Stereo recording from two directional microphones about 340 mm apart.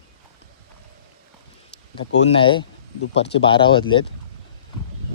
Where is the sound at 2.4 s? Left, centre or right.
Centre.